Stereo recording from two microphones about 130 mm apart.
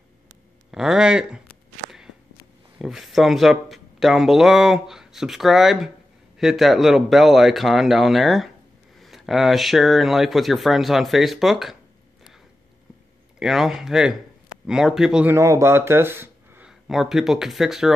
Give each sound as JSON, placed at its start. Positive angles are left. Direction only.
{"t": 0.7, "sound": "speech", "side_deg": -5}
{"t": 2.8, "sound": "speech", "side_deg": 0}
{"t": 13.4, "sound": "speech", "side_deg": -5}
{"t": 15.3, "sound": "speech", "side_deg": -20}
{"t": 16.6, "sound": "speech", "side_deg": -5}